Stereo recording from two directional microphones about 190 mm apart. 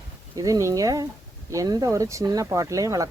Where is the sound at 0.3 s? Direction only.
20° right (ahead or behind).